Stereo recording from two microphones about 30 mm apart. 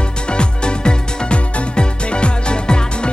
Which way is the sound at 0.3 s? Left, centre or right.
Left.